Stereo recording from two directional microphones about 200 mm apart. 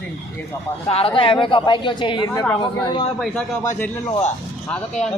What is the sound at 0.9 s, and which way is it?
A woman's voice, 30° left (ahead or behind).